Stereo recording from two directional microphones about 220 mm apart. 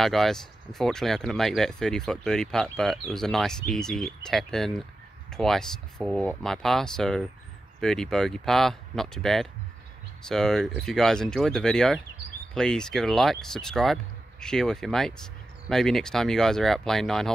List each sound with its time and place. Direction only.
0.0 s speech: centre (ahead or behind)